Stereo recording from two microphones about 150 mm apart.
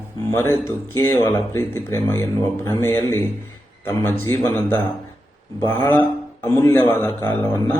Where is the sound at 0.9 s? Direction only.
15° left (ahead or behind).